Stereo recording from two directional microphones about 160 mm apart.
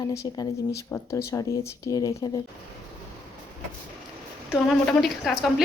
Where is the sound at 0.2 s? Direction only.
25° left (ahead or behind).